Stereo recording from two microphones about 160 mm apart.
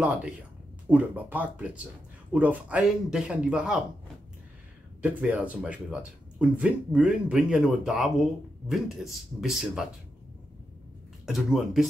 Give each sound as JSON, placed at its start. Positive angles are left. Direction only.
{"t": 0.8, "sound": "speech", "side_deg": -10}
{"t": 5.0, "sound": "speech", "side_deg": -10}
{"t": 11.2, "sound": "speech", "side_deg": 0}